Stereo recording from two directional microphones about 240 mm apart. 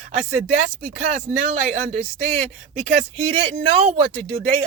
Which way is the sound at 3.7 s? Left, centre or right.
Right.